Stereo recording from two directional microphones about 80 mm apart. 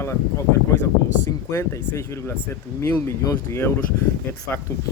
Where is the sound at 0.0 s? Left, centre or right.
Left.